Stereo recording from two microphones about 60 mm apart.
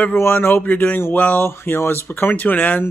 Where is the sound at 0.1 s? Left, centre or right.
Left.